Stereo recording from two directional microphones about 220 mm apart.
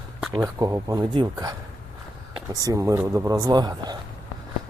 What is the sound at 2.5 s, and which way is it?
Speech, 15° right (ahead or behind).